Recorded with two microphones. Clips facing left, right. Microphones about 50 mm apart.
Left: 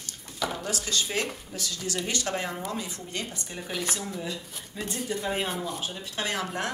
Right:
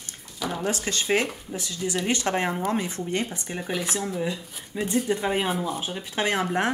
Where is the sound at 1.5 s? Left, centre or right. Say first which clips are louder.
Right 4 dB; right.